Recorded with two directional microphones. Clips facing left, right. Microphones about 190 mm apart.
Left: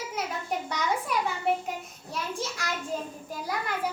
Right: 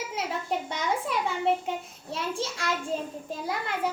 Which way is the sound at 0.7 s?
25° right (ahead or behind).